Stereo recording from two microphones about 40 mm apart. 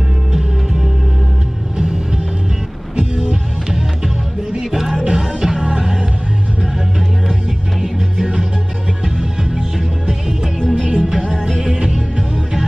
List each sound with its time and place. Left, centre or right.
3.0 s music: centre
7.8 s music: centre